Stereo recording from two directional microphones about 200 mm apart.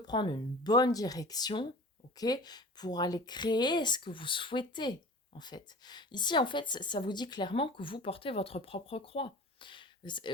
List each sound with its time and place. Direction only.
0.0 s speech: 20° left (ahead or behind)